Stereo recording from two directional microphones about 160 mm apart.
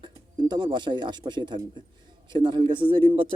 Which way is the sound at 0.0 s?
30° right (ahead or behind).